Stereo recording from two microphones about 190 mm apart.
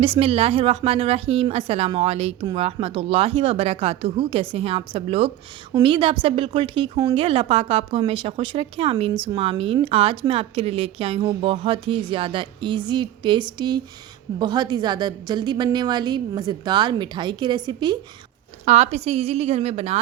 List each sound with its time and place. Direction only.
0.0 s a woman's voice: 30° right (ahead or behind)
18.6 s a woman's voice: 35° right (ahead or behind)